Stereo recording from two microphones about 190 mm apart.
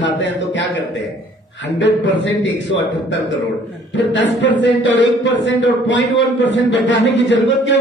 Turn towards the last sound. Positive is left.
turn(degrees=80)